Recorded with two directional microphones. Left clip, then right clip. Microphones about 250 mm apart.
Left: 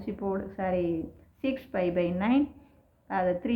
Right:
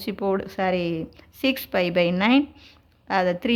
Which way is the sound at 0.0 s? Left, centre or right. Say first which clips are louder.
Right 7 dB; right.